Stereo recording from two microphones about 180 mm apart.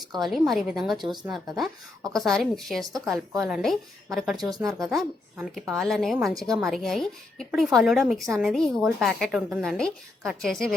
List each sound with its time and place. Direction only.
0.3 s a woman's voice: centre (ahead or behind)
4.4 s speech: 20° right (ahead or behind)
4.8 s a woman's voice: centre (ahead or behind)